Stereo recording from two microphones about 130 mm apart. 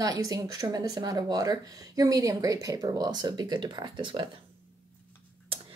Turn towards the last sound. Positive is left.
turn(degrees=-40)  # may be behind; listen again after turning